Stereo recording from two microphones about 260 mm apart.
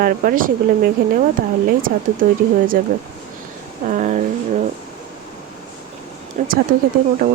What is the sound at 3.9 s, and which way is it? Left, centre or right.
Speech, right.